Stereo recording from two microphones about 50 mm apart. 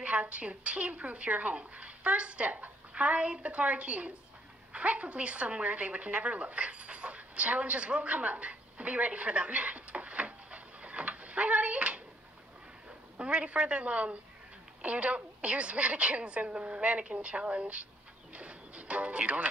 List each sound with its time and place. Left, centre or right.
0.0 s a woman's voice: right
4.7 s a sound: right
13.2 s a woman's voice: right
18.3 s music: right